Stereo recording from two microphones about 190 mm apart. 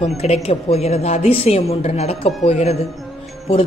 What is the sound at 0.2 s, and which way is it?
A woman's voice, 35° left (ahead or behind).